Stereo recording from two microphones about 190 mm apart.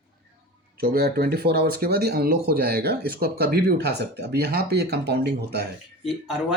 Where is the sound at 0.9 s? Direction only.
55° right (ahead or behind).